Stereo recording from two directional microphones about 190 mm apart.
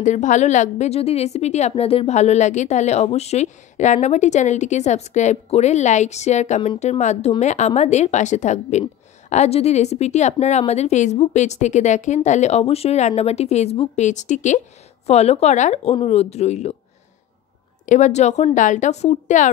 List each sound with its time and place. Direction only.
0.0 s a woman's voice: 40° left (ahead or behind)
17.8 s a woman's voice: 40° left (ahead or behind)